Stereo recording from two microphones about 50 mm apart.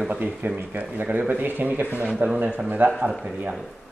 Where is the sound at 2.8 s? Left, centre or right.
Right.